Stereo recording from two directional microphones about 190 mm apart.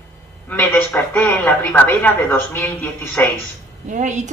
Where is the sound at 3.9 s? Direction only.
40° right (ahead or behind).